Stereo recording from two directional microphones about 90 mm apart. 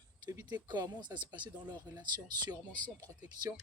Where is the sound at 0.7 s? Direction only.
50° right (ahead or behind).